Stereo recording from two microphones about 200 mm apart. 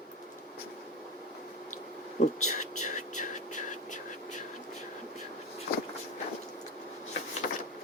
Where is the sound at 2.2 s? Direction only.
35° left (ahead or behind).